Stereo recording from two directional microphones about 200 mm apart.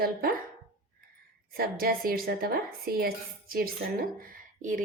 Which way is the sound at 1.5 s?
50° right (ahead or behind).